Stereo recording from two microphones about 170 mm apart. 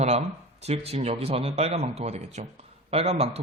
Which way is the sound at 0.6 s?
40° right (ahead or behind).